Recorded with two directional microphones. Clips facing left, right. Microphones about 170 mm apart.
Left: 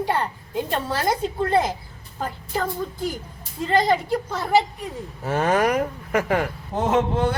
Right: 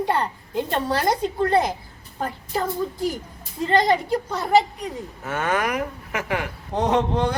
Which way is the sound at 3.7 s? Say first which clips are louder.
Even; centre (ahead or behind).